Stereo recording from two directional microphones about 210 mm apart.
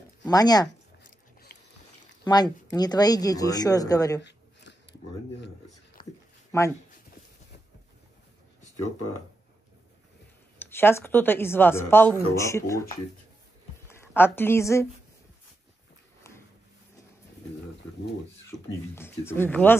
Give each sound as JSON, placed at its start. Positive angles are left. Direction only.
{"t": 0.2, "sound": "speech", "side_deg": 15}
{"t": 2.2, "sound": "speech", "side_deg": 20}
{"t": 4.2, "sound": "a sound", "side_deg": 55}
{"t": 6.0, "sound": "a sound", "side_deg": 25}
{"t": 6.5, "sound": "speech", "side_deg": 15}
{"t": 10.6, "sound": "speech", "side_deg": 10}
{"t": 13.8, "sound": "speech", "side_deg": 10}
{"t": 16.3, "sound": "a sound", "side_deg": 15}
{"t": 18.9, "sound": "speech", "side_deg": 10}